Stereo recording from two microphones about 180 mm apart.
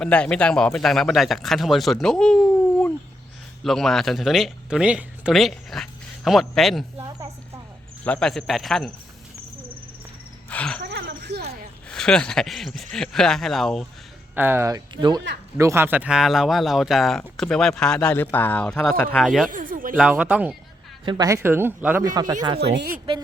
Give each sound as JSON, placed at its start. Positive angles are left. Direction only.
{"t": 0.0, "sound": "speech", "side_deg": 5}
{"t": 8.0, "sound": "speech", "side_deg": 5}
{"t": 10.5, "sound": "a sound", "side_deg": 5}
{"t": 10.8, "sound": "a sound", "side_deg": -70}
{"t": 11.9, "sound": "speech", "side_deg": 5}
{"t": 14.3, "sound": "speech", "side_deg": -10}
{"t": 14.9, "sound": "speech", "side_deg": -25}
{"t": 19.5, "sound": "speech", "side_deg": -50}
{"t": 20.0, "sound": "speech", "side_deg": -5}
{"t": 21.0, "sound": "speech", "side_deg": -25}
{"t": 22.6, "sound": "speech", "side_deg": -65}